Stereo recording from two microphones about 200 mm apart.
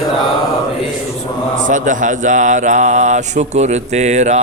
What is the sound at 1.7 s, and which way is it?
Mantra, 40° right (ahead or behind).